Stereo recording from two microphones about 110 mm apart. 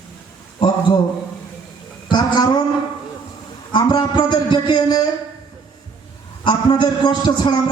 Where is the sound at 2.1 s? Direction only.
40° left (ahead or behind).